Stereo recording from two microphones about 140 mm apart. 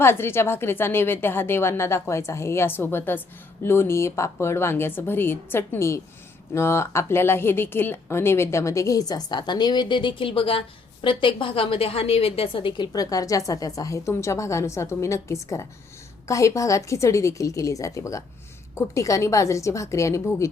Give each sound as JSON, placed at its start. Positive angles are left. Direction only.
{"t": 0.0, "sound": "a woman's voice", "side_deg": 15}